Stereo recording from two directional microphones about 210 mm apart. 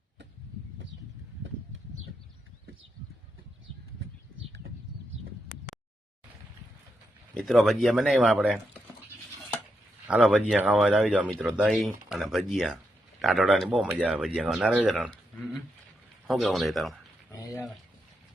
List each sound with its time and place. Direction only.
4.4 s bird: 65° right (ahead or behind)
7.3 s speech: centre (ahead or behind)
10.1 s speech: 5° right (ahead or behind)
16.2 s speech: centre (ahead or behind)
17.3 s a sound: 15° left (ahead or behind)